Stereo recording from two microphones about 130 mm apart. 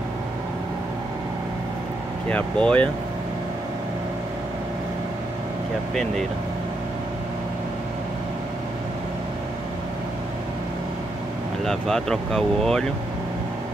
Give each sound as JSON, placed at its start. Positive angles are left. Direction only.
{"t": 2.2, "sound": "speech", "side_deg": 10}
{"t": 11.6, "sound": "speech", "side_deg": 5}